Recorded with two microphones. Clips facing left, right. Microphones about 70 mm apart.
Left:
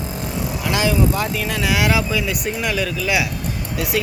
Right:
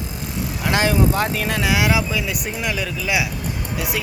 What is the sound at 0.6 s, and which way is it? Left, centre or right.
Speech, right.